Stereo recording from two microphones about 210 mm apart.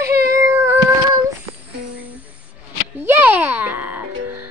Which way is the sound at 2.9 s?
10° right (ahead or behind).